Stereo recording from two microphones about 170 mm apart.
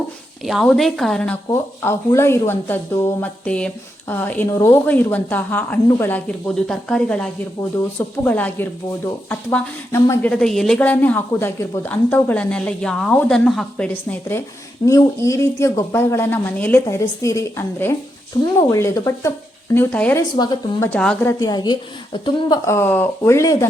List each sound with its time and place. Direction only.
0.4 s a woman's voice: centre (ahead or behind)
1.5 s speech: 15° left (ahead or behind)
20.3 s speech: 25° left (ahead or behind); by 21.3 s 10° left (ahead or behind)
21.3 s speech: 25° left (ahead or behind)